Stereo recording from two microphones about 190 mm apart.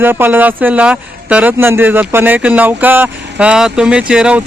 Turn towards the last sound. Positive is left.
turn(degrees=-5)  # may be behind; listen again after turning